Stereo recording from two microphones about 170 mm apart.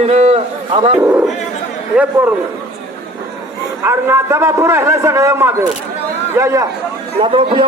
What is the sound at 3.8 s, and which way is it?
A man's voice, 15° right (ahead or behind).